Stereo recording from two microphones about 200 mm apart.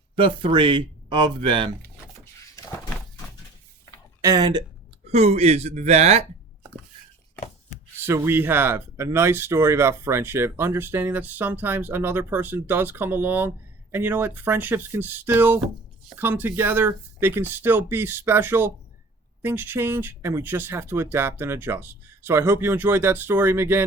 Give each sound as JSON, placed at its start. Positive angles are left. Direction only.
{"t": 0.2, "sound": "speech", "side_deg": -25}
{"t": 2.6, "sound": "a sound", "side_deg": 15}
{"t": 4.2, "sound": "speech", "side_deg": -20}
{"t": 5.0, "sound": "speech", "side_deg": -35}
{"t": 8.0, "sound": "speech", "side_deg": -10}